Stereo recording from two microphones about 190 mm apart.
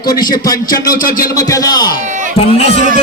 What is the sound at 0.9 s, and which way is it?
Speech, 45° left (ahead or behind).